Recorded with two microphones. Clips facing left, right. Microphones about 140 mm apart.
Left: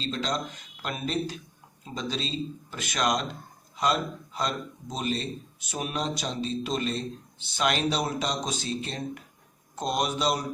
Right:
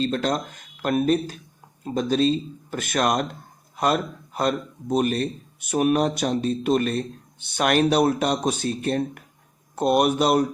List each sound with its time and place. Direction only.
0.0 s a man's voice: 55° right (ahead or behind)